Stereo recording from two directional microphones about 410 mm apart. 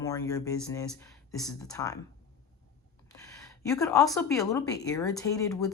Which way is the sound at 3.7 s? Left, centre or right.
Centre.